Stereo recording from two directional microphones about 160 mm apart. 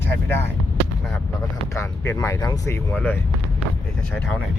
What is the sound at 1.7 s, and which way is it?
Speech, 15° left (ahead or behind).